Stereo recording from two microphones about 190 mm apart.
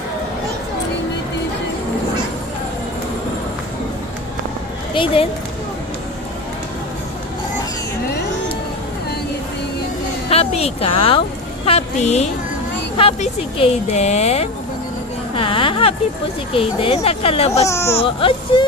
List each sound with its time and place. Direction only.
4.9 s speech: 30° left (ahead or behind)
10.2 s a woman's voice: 35° left (ahead or behind)
15.4 s a sound: 30° left (ahead or behind)
16.5 s speech: 30° left (ahead or behind)
17.7 s speech: 15° left (ahead or behind)
17.9 s speech: 30° left (ahead or behind)